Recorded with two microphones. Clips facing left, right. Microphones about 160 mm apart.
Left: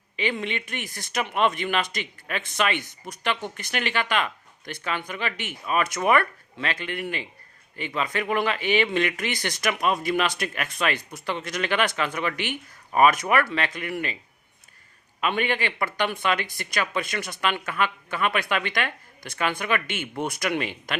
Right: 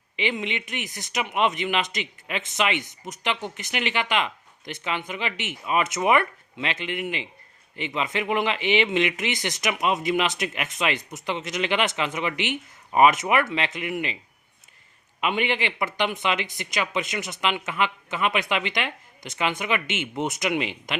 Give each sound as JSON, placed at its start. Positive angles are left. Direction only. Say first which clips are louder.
{"t": 0.2, "sound": "speech", "louder": "even", "side_deg": -20}
{"t": 15.2, "sound": "speech", "louder": "even", "side_deg": -20}